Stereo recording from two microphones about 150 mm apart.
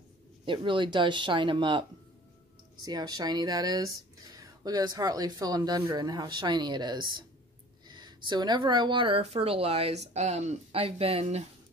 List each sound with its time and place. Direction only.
0.5 s speech: 30° right (ahead or behind)